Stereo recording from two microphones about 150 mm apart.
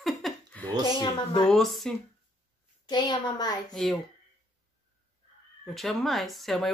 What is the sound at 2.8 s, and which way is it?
Speech, 30° left (ahead or behind).